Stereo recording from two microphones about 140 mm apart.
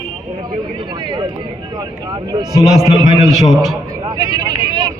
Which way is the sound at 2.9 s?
30° right (ahead or behind).